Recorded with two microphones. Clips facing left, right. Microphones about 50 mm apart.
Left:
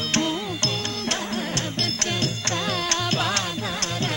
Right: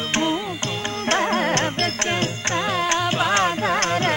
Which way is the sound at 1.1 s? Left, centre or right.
Right.